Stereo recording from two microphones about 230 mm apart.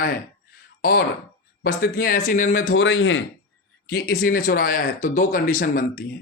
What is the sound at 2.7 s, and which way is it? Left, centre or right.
Speech, left.